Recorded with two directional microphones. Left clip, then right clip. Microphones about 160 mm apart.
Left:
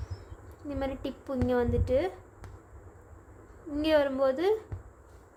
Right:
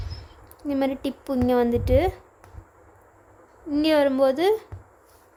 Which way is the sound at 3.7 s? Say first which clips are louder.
Right 6 dB; 40° right (ahead or behind).